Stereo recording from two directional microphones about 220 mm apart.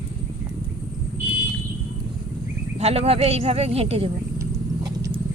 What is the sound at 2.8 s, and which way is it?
Speech, 30° right (ahead or behind).